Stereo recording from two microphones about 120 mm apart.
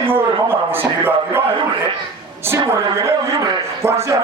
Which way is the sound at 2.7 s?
25° right (ahead or behind).